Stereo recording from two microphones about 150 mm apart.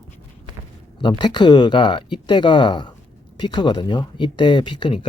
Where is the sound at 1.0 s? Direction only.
30° left (ahead or behind).